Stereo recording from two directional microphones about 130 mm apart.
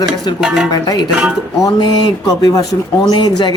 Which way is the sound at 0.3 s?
5° right (ahead or behind).